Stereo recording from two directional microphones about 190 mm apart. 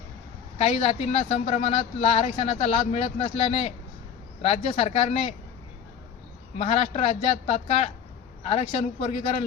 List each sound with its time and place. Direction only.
0.6 s speech: 35° left (ahead or behind)
6.6 s speech: 30° left (ahead or behind)